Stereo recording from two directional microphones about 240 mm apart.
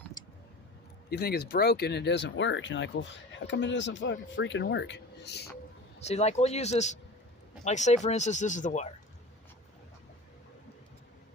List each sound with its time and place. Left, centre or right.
1.1 s speech: left
6.1 s speech: left